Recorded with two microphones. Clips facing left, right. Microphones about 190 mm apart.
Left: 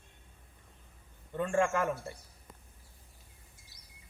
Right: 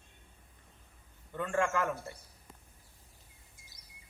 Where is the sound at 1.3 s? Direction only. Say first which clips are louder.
Left 2 dB; 20° left (ahead or behind).